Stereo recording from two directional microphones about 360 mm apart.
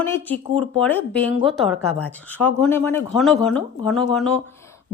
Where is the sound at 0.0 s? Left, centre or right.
Centre.